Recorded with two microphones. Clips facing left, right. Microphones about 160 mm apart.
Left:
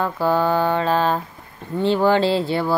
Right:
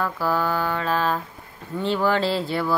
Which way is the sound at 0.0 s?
25° left (ahead or behind).